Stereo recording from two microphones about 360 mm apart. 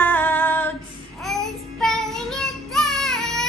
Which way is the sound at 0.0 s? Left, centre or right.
Centre.